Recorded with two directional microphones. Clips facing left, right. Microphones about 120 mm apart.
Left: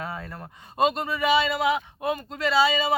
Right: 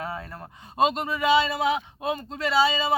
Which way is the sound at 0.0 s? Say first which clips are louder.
Right 1 dB; 25° right (ahead or behind).